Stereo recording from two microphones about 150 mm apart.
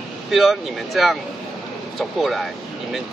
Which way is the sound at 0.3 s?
Centre (ahead or behind).